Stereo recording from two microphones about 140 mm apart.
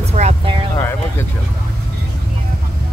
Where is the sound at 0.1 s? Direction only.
50° right (ahead or behind).